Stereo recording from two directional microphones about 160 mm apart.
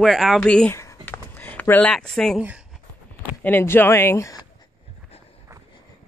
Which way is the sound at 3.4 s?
15° left (ahead or behind).